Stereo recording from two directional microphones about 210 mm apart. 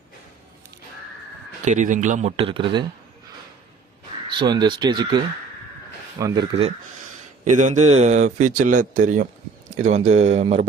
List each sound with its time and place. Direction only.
1.6 s speech: 35° right (ahead or behind)
4.3 s speech: 20° right (ahead or behind)
7.4 s speech: 35° right (ahead or behind)